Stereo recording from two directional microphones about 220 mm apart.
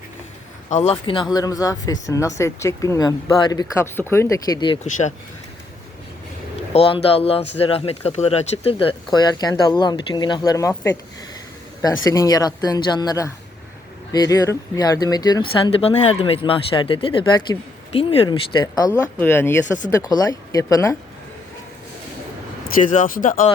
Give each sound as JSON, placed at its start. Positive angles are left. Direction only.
{"t": 0.7, "sound": "speech", "side_deg": 30}
{"t": 6.7, "sound": "speech", "side_deg": 25}
{"t": 12.0, "sound": "speech", "side_deg": 15}
{"t": 22.8, "sound": "speech", "side_deg": 35}